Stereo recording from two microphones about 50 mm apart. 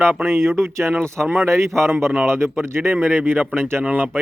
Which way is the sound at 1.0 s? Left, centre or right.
Right.